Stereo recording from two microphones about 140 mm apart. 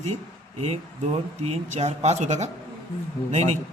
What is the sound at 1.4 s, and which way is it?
A man's voice, 55° right (ahead or behind).